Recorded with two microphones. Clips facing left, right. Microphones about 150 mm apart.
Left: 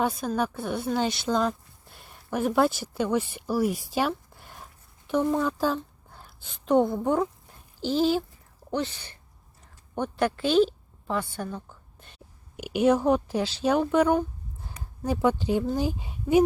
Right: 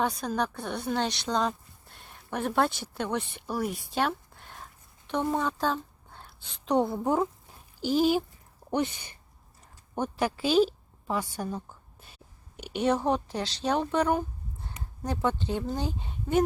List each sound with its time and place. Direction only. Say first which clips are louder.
0.0 s a woman's voice: left 2 dB; centre (ahead or behind); by 9.1 s 15° right (ahead or behind)
9.9 s a woman's voice: left 2 dB; 5° right (ahead or behind)
11.9 s whispering: left 1 dB; 5° right (ahead or behind)
12.5 s speech: left 5 dB; 5° left (ahead or behind)